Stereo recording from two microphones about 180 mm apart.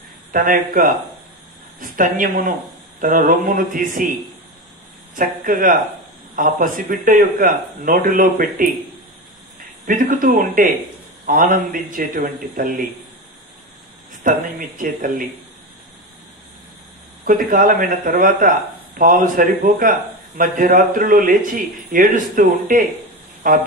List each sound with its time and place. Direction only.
0.3 s a man's voice: 50° right (ahead or behind)
5.1 s a man's voice: 50° right (ahead or behind)
9.8 s a man's voice: 50° right (ahead or behind)
14.2 s a man's voice: 45° right (ahead or behind)
17.2 s a man's voice: 50° right (ahead or behind)